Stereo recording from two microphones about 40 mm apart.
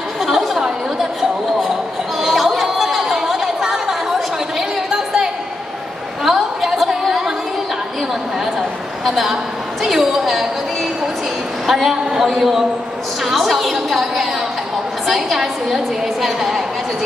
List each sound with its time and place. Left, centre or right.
0.2 s chatter: centre
0.6 s chatter: centre
9.0 s a woman's voice: centre
9.8 s a sound: centre
11.7 s a woman's voice: centre
13.2 s a sound: centre